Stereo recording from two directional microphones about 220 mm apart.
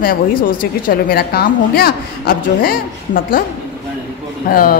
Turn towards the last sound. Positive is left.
turn(degrees=40)  # may be behind; listen again after turning